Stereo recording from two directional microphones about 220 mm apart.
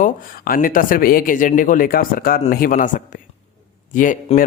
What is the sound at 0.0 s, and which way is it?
Speech, 40° left (ahead or behind).